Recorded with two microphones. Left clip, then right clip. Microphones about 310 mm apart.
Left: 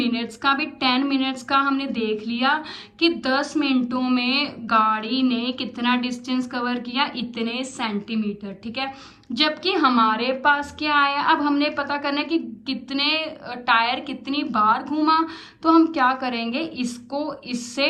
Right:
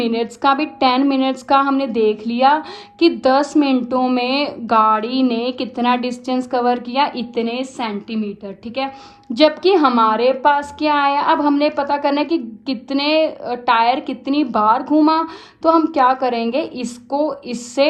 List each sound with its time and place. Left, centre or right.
0.0 s a woman's voice: centre